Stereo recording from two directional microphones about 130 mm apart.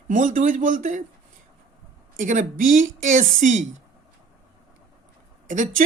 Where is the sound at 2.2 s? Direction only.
85° right.